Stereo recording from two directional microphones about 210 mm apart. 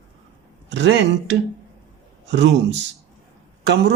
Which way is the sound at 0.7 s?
55° right (ahead or behind).